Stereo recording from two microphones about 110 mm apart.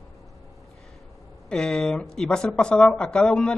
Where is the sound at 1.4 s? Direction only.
5° left (ahead or behind).